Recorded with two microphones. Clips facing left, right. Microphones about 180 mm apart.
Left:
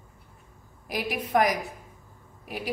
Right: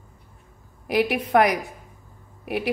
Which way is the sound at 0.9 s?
65° right (ahead or behind).